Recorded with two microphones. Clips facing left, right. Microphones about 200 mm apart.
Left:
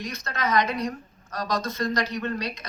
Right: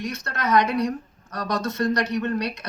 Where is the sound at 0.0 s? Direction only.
70° right (ahead or behind).